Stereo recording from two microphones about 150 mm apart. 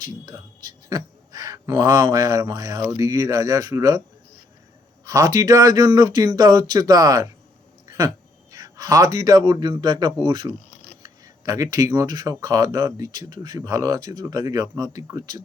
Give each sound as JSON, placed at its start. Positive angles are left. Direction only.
{"t": 0.0, "sound": "speech", "side_deg": -30}
{"t": 5.0, "sound": "speech", "side_deg": -25}
{"t": 7.9, "sound": "a sound", "side_deg": -25}
{"t": 8.5, "sound": "speech", "side_deg": -25}